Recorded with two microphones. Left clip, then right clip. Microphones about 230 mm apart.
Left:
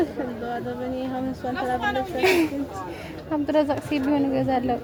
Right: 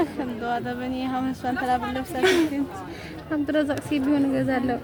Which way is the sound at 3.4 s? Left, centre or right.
Centre.